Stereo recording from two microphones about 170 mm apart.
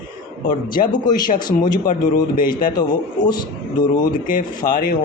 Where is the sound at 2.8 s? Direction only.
25° left (ahead or behind).